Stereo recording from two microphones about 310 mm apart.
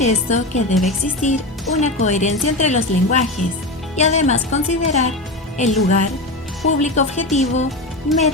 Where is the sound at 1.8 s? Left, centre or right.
Left.